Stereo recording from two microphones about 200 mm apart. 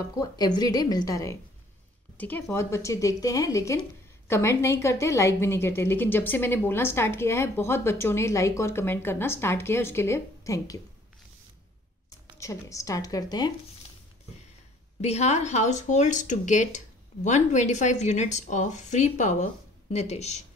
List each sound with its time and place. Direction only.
0.0 s a woman's voice: 15° left (ahead or behind)
12.4 s a woman's voice: 15° left (ahead or behind)
15.0 s speech: 35° left (ahead or behind)